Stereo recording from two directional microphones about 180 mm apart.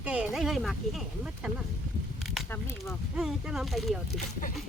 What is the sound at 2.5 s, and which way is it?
Speech, 15° left (ahead or behind).